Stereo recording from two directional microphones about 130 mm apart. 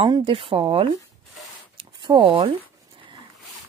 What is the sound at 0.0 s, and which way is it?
Speech, 45° right (ahead or behind).